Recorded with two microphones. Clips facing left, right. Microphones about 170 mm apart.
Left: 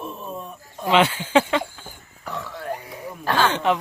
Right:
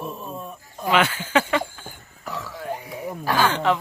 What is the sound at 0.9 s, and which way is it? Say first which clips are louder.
Speech: left 3 dB; 25° left (ahead or behind).